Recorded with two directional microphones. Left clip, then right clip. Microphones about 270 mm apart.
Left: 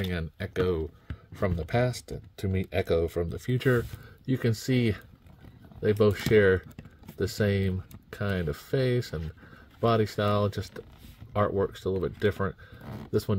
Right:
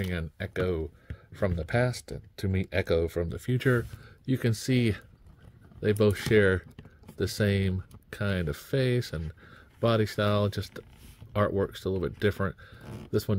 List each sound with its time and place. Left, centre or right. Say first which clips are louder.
0.0 s speech: left 1 dB; centre